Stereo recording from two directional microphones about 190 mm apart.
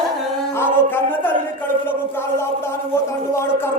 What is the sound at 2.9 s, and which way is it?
Speech, 15° left (ahead or behind).